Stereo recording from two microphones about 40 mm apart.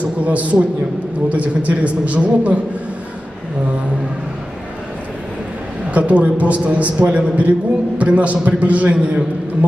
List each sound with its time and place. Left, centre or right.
0.0 s a man's voice: right
5.9 s a man's voice: right